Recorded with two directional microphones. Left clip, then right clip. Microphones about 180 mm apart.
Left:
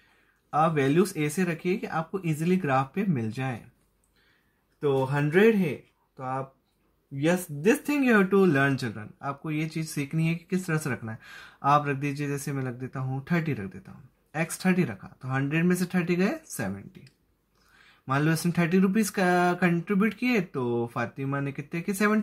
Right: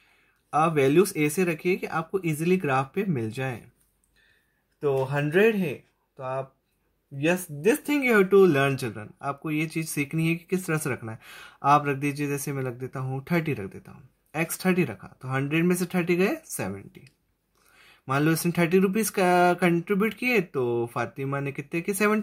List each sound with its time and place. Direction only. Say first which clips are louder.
0.5 s speech: right 2 dB; 30° right (ahead or behind)
4.7 s speech: even; 20° right (ahead or behind)